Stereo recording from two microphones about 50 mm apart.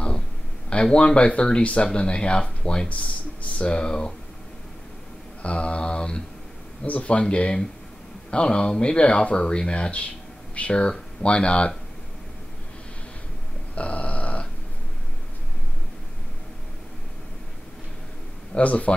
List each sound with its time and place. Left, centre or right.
0.8 s speech: centre
5.4 s speech: left
13.7 s burping: left
18.5 s speech: left